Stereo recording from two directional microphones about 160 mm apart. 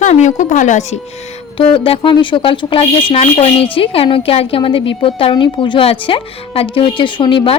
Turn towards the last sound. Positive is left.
turn(degrees=30)  # may be behind; listen again after turning